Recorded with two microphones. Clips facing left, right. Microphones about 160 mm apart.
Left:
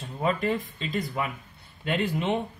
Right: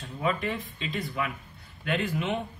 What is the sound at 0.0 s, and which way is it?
Speech, 40° left (ahead or behind).